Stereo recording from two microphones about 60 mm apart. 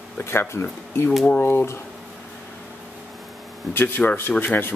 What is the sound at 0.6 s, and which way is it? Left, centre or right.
Speech, left.